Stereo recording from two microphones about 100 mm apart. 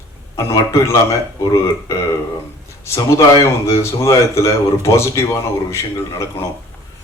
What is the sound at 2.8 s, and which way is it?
Speech, 30° left (ahead or behind).